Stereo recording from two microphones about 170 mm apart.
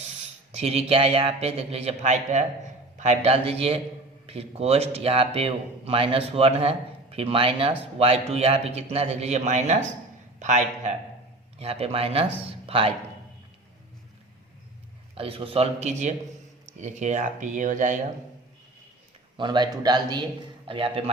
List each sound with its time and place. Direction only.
0.5 s a man's voice: 35° right (ahead or behind)
15.1 s a man's voice: 35° right (ahead or behind); by 17.9 s 50° right (ahead or behind)
19.4 s a man's voice: 25° right (ahead or behind)